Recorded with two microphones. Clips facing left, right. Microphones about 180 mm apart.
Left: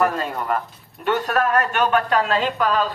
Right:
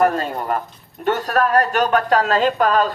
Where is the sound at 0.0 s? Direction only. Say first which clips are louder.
Right 3 dB; 40° right (ahead or behind).